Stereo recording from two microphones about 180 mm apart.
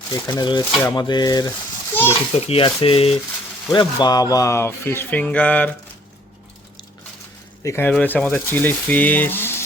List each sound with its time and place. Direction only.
0.1 s speech: 20° left (ahead or behind)
2.0 s a child's voice: 30° left (ahead or behind); by 5.7 s 10° left (ahead or behind)
7.6 s speech: 15° left (ahead or behind)